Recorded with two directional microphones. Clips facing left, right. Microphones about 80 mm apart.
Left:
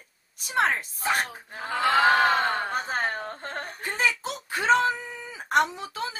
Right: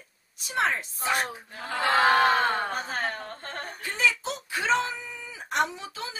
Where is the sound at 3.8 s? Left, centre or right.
Left.